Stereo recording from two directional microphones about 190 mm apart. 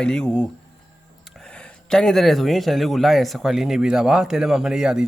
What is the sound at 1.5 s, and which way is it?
Speech, 5° left (ahead or behind).